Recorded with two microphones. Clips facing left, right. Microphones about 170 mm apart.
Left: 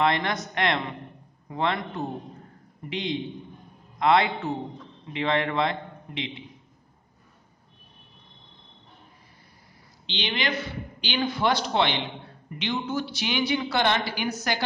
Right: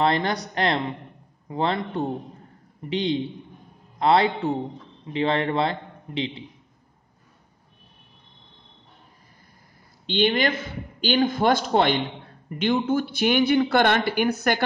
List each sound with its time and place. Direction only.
0.0 s a man's voice: 35° right (ahead or behind)
10.0 s speech: 50° right (ahead or behind)